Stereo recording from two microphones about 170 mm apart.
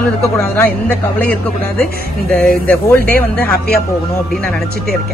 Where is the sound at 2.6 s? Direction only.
15° left (ahead or behind).